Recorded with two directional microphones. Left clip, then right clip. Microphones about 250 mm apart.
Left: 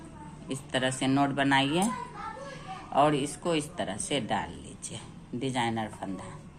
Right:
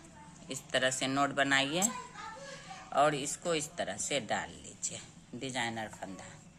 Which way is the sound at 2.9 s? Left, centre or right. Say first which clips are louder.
Left 4 dB; centre.